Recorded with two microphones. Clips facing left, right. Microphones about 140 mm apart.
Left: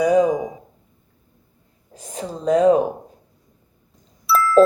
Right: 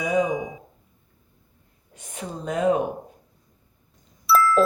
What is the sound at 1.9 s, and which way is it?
Speech, 35° left (ahead or behind).